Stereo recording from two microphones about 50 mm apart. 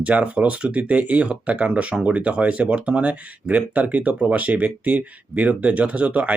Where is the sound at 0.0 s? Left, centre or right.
Right.